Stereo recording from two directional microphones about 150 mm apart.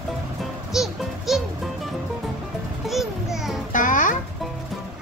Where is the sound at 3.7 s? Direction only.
60° left (ahead or behind).